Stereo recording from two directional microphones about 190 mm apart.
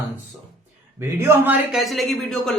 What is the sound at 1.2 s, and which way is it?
A man's voice, 10° right (ahead or behind).